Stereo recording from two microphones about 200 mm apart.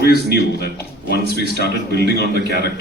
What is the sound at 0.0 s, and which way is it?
Speech, 55° left (ahead or behind).